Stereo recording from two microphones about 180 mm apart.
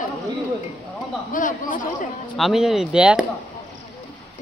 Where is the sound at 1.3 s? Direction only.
45° left (ahead or behind).